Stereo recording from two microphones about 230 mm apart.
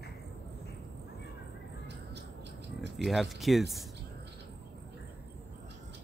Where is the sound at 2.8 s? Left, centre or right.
Right.